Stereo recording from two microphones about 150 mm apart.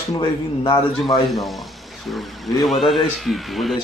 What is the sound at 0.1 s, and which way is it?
Speech, 30° left (ahead or behind).